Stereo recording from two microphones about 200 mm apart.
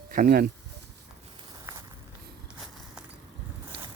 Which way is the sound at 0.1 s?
50° right (ahead or behind).